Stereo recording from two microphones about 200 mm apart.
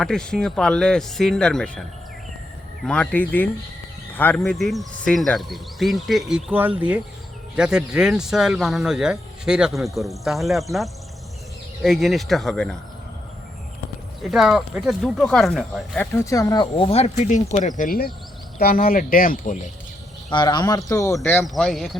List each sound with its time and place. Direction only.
0.0 s speech: 5° left (ahead or behind)
14.3 s speech: centre (ahead or behind)
16.1 s speech: 15° left (ahead or behind); by 19.7 s 40° left (ahead or behind)
20.3 s speech: 20° left (ahead or behind)
21.4 s speech: centre (ahead or behind)